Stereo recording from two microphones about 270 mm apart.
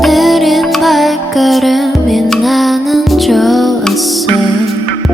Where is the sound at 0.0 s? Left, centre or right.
Centre.